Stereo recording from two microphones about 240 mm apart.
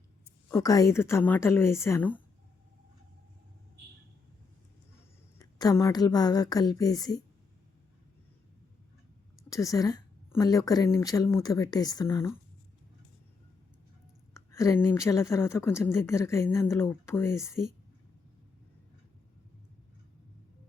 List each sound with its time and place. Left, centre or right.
0.5 s a woman's voice: centre
5.4 s a woman's voice: centre
9.5 s a woman's voice: centre
14.3 s a woman's voice: centre